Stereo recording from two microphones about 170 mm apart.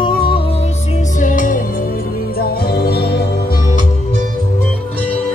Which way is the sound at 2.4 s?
70° left (ahead or behind).